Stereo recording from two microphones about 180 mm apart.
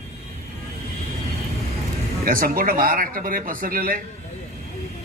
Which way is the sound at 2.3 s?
55° right (ahead or behind).